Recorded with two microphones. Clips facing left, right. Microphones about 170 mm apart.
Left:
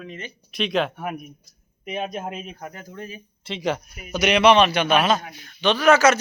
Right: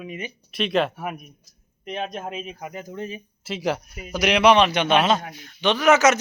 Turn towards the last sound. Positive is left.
turn(degrees=-20)  # may be behind; listen again after turning